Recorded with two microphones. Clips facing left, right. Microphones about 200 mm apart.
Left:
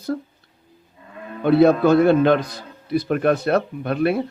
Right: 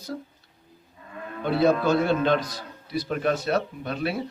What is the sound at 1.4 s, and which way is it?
A man's voice, 55° left (ahead or behind).